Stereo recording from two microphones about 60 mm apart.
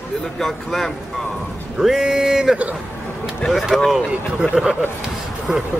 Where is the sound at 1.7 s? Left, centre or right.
Centre.